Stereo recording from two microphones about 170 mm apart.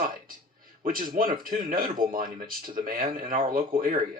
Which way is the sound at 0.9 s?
55° right (ahead or behind).